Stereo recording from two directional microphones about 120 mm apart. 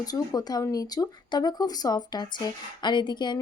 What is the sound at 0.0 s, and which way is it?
Speech, 30° left (ahead or behind).